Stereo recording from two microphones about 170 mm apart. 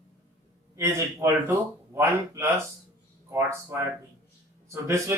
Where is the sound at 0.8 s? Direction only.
15° right (ahead or behind).